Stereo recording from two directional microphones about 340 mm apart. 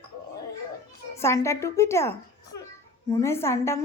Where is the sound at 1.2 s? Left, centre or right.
Centre.